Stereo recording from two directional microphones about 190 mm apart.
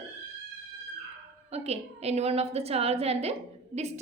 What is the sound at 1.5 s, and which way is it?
A woman's voice, 35° right (ahead or behind).